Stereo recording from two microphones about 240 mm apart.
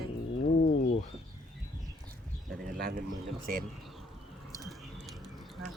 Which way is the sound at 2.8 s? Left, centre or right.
Right.